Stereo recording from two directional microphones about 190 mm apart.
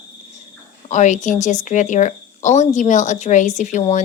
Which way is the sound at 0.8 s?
40° left (ahead or behind).